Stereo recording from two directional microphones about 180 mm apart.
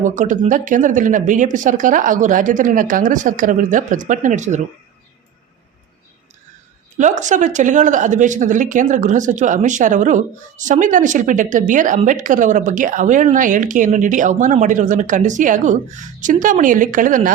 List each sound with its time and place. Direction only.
0.0 s speech: 45° right (ahead or behind)
6.9 s speech: 45° right (ahead or behind)